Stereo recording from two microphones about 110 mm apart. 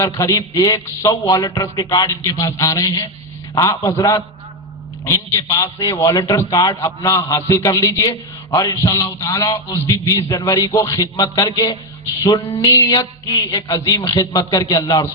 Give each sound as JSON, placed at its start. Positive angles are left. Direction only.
{"t": 0.2, "sound": "a man's voice", "side_deg": 30}